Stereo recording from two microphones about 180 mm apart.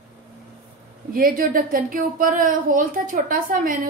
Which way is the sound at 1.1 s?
50° right (ahead or behind).